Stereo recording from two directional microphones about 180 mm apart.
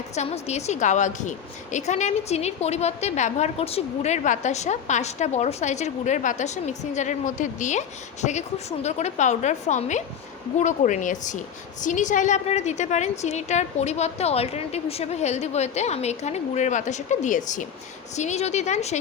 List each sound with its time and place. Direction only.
0.2 s a woman's voice: 35° left (ahead or behind)